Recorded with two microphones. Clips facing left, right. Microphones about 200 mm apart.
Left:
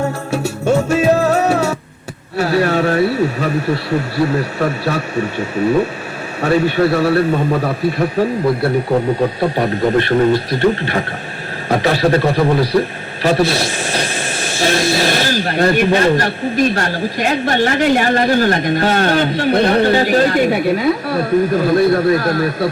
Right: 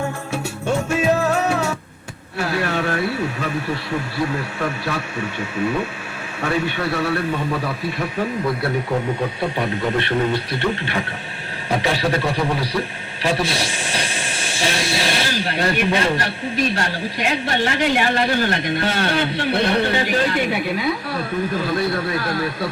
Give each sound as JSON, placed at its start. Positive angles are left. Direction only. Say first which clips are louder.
{"t": 0.3, "sound": "music", "louder": "left 8 dB", "side_deg": 40}
{"t": 2.4, "sound": "a man's voice", "louder": "left 7 dB", "side_deg": 35}
{"t": 9.4, "sound": "a man's voice", "louder": "left 6 dB", "side_deg": 40}